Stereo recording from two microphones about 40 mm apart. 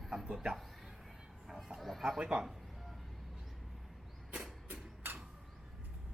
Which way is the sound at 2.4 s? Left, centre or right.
Centre.